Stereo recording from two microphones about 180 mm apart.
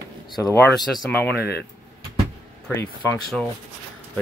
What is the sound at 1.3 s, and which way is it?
Speech, 65° left (ahead or behind).